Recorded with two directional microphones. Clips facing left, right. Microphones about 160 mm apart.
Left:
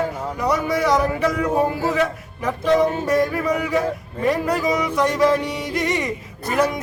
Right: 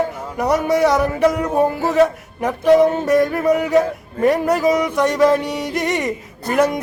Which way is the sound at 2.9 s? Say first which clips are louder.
Right 4 dB; 50° right (ahead or behind).